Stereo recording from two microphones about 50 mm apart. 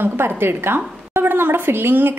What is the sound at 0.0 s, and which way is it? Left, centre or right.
A woman's voice, right.